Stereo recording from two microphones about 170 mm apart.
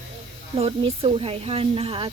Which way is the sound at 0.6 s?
35° right (ahead or behind).